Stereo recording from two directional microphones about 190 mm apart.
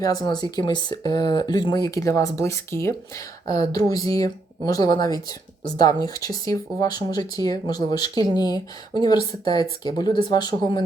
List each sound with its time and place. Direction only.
0.0 s speech: 20° left (ahead or behind)